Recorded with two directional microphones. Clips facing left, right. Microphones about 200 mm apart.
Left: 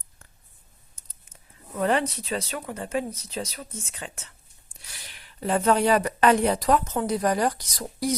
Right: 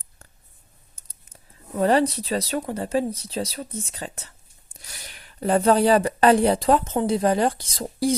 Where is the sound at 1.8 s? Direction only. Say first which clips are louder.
Right 5 dB; 35° right (ahead or behind).